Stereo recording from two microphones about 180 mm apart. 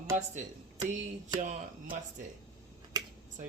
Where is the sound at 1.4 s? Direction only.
45° right (ahead or behind).